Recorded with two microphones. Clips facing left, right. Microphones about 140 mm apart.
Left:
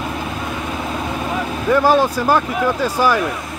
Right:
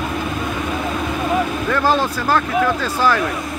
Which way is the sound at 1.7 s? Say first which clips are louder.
Left 7 dB; 15° left (ahead or behind).